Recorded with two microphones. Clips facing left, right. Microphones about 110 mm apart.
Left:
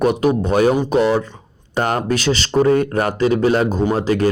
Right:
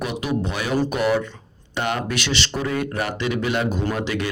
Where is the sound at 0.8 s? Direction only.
30° left (ahead or behind).